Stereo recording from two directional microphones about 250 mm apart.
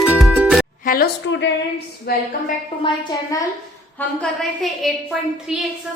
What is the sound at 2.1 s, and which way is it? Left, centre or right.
Speech, left.